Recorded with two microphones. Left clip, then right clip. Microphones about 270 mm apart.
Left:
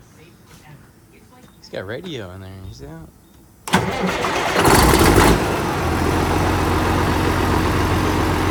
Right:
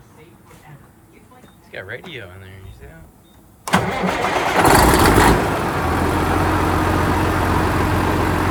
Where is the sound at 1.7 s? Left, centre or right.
Centre.